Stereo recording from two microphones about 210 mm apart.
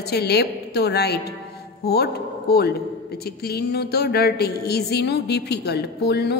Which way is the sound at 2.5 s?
50° left (ahead or behind).